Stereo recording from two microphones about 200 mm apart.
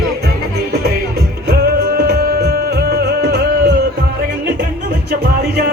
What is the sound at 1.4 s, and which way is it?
Music, 55° right (ahead or behind).